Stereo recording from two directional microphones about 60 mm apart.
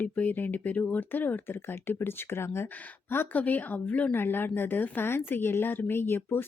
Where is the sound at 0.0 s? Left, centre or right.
Left.